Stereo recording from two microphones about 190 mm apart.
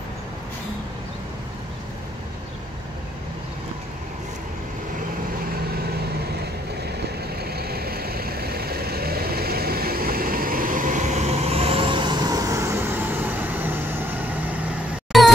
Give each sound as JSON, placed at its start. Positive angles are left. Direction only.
{"t": 7.3, "sound": "vehicle", "side_deg": -55}